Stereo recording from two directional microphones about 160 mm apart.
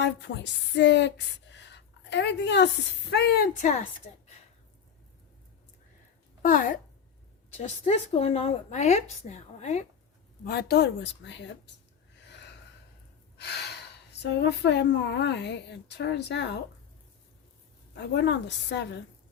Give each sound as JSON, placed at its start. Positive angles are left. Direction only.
{"t": 0.0, "sound": "speech", "side_deg": 90}
{"t": 3.6, "sound": "a woman's voice", "side_deg": 45}
{"t": 6.4, "sound": "a woman's voice", "side_deg": 60}
{"t": 7.5, "sound": "a woman's voice", "side_deg": 45}
{"t": 10.4, "sound": "speech", "side_deg": 80}
{"t": 12.3, "sound": "gasp", "side_deg": 90}
{"t": 14.1, "sound": "speech", "side_deg": 90}
{"t": 17.9, "sound": "speech", "side_deg": 90}